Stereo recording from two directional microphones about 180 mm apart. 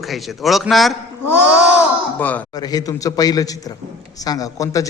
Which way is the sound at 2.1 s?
10° left (ahead or behind).